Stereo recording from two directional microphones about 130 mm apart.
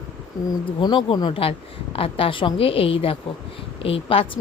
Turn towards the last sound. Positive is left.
turn(degrees=45)  # may be behind; listen again after turning